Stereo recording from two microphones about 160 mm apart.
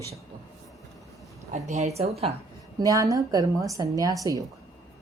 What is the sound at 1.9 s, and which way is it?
Speech, 40° right (ahead or behind).